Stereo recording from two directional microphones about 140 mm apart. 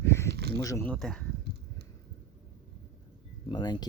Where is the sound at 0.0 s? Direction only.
20° left (ahead or behind).